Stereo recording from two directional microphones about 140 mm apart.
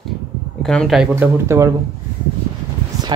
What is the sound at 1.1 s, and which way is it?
Speech, 20° right (ahead or behind).